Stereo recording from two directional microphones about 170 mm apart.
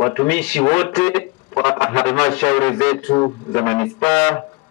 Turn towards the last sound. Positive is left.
turn(degrees=10)  # may be behind; listen again after turning